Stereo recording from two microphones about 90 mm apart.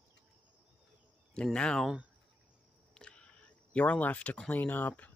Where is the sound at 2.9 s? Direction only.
10° left (ahead or behind).